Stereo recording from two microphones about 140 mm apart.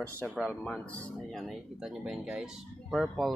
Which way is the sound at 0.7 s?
10° left (ahead or behind).